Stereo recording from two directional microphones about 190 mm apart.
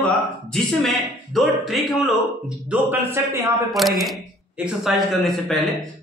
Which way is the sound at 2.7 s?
10° right (ahead or behind).